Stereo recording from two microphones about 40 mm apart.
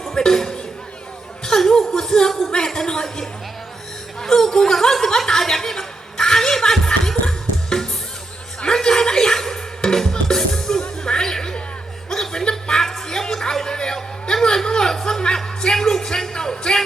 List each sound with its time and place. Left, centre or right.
0.0 s music: centre
1.5 s a sound: centre
2.5 s music: centre
4.2 s chuckle: centre
8.6 s music: centre
12.1 s chuckle: centre
13.1 s music: centre
13.9 s a sound: centre
15.6 s music: centre